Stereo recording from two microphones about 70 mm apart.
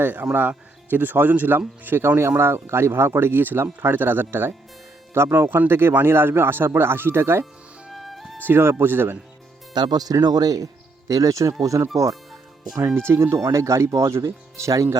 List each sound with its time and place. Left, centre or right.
0.0 s speech: right
7.9 s music: centre
8.4 s speech: right
9.7 s speech: right
12.8 s speech: right
13.3 s speech: right